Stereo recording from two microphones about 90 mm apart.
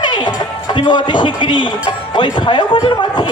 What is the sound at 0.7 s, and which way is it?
Speech, 60° left (ahead or behind).